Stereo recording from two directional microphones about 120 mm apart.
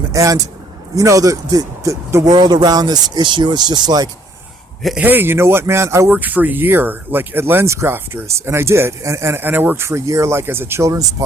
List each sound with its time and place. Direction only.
0.1 s a man's voice: 25° right (ahead or behind)
4.9 s speech: 15° right (ahead or behind)